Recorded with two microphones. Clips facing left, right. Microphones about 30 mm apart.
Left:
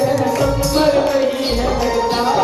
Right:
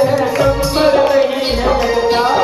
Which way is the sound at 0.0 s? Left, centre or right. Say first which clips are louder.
Right 3 dB; right.